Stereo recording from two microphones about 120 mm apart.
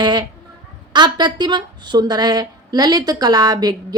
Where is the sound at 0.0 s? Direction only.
35° right (ahead or behind).